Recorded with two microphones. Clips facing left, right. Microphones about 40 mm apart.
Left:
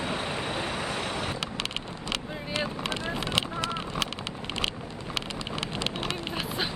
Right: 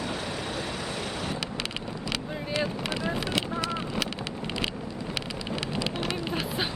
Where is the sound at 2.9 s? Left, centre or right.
Left.